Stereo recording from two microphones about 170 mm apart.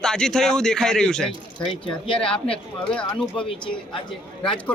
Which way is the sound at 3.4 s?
30° left (ahead or behind).